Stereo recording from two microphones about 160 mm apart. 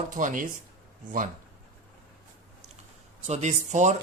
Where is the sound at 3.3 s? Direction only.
45° right (ahead or behind).